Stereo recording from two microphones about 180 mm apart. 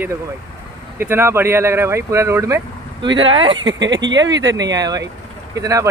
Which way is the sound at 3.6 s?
85° right.